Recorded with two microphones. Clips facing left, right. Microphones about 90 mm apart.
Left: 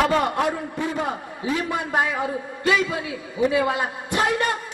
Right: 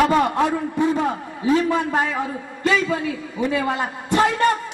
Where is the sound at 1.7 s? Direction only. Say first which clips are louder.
Right 3 dB; 20° left (ahead or behind).